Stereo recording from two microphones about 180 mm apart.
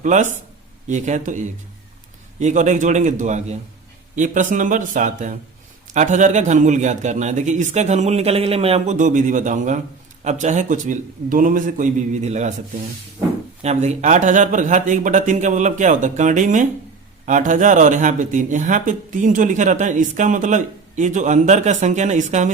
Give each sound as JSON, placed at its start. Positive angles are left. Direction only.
{"t": 0.0, "sound": "a man's voice", "side_deg": -45}